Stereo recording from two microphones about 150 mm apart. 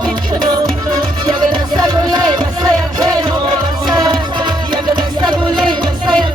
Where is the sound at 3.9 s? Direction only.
30° right (ahead or behind).